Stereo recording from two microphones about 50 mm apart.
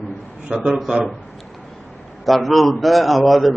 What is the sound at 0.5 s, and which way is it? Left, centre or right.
Speech, centre.